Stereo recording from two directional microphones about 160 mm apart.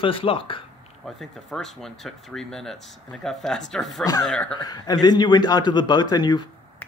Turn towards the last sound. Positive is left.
turn(degrees=25)  # may be behind; listen again after turning